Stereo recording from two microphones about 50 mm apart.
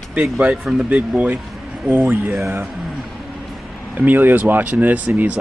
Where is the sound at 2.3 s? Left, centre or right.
Right.